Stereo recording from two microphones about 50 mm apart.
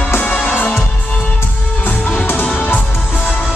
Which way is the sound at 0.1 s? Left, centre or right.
Left.